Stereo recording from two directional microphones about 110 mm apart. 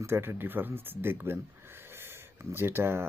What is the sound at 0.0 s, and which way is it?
Speech, 20° right (ahead or behind).